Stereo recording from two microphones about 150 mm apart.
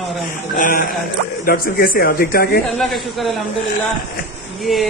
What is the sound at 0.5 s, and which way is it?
A man's voice, 70° left (ahead or behind).